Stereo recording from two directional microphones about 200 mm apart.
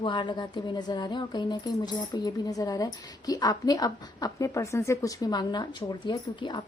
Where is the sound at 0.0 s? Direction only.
25° left (ahead or behind).